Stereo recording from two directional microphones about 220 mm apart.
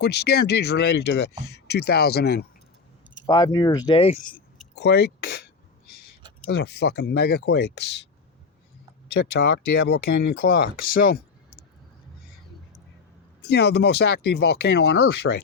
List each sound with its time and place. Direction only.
0.0 s speech: 50° left (ahead or behind)
3.2 s speech: 15° left (ahead or behind)
4.2 s speech: 40° left (ahead or behind)
6.5 s speech: 50° left (ahead or behind)
9.1 s speech: 45° left (ahead or behind)
13.4 s speech: 50° left (ahead or behind)